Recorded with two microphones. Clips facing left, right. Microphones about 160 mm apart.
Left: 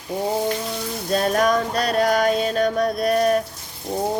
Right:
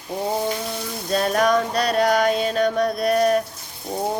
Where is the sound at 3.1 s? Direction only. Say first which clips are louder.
Right 1 dB; 40° right (ahead or behind).